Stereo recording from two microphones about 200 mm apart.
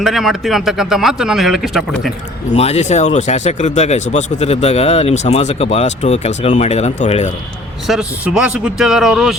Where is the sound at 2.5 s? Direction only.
35° left (ahead or behind).